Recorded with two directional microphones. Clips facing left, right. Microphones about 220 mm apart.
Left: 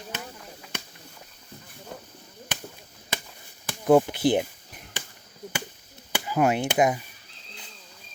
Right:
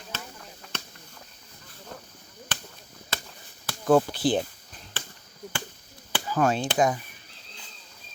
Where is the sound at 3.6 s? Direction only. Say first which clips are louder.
Left 2 dB; 15° left (ahead or behind).